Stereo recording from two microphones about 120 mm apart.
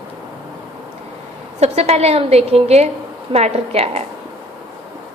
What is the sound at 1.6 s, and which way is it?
A woman's voice, 60° right (ahead or behind).